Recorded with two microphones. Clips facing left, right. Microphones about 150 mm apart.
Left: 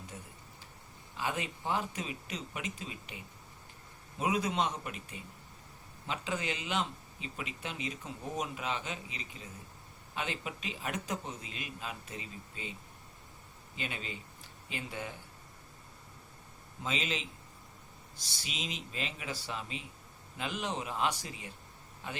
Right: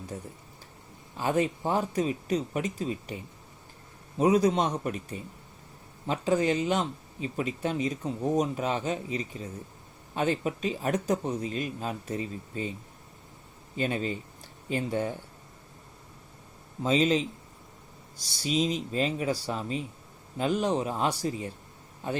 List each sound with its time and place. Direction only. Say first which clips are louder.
0.1 s speech: right 9 dB; 40° right (ahead or behind)
13.7 s speech: right 12 dB; 40° right (ahead or behind)
16.8 s speech: right 12 dB; 40° right (ahead or behind)